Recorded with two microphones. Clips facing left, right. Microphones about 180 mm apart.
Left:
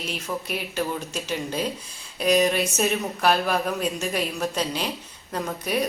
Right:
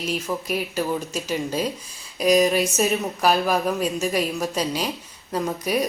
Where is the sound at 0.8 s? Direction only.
5° right (ahead or behind).